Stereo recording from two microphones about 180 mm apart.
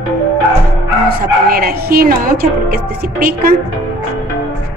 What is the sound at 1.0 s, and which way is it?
A woman's voice, 55° right (ahead or behind).